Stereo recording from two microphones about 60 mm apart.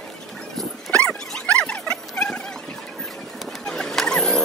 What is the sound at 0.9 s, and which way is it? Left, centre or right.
Dog, centre.